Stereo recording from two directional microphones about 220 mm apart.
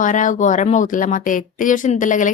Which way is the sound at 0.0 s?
35° left (ahead or behind).